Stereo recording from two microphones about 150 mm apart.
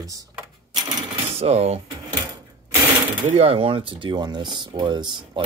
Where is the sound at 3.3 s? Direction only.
40° right (ahead or behind).